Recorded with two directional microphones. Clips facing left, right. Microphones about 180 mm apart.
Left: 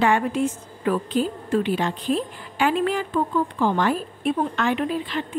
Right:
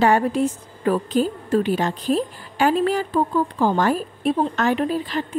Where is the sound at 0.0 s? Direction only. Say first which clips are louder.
Right 3 dB; 40° right (ahead or behind).